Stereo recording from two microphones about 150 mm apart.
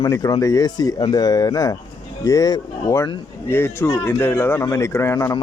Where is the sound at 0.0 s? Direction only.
20° left (ahead or behind).